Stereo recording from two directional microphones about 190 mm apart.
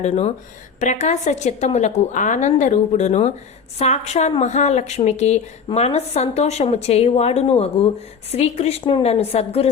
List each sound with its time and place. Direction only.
0.0 s a woman's voice: 35° left (ahead or behind)